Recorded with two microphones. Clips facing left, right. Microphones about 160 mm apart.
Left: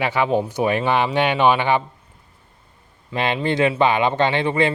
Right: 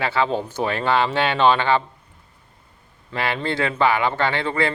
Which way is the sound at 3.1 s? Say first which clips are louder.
Left 3 dB; 20° left (ahead or behind).